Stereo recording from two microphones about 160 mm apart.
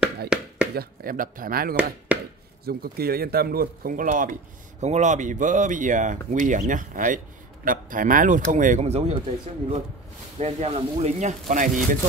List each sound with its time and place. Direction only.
0.3 s a sound: 5° right (ahead or behind)
0.7 s speech: 60° right (ahead or behind)
2.1 s chop: 10° right (ahead or behind)
2.6 s speech: 70° right (ahead or behind); by 9.2 s 40° right (ahead or behind)
10.4 s speech: 40° right (ahead or behind)